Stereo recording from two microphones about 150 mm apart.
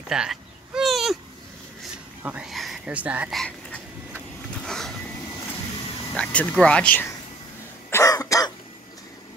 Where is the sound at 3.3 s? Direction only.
10° left (ahead or behind).